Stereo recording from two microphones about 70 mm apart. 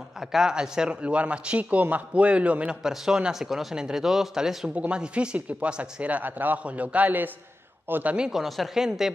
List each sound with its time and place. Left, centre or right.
0.3 s a man's voice: centre
4.7 s speech: centre
8.3 s speech: centre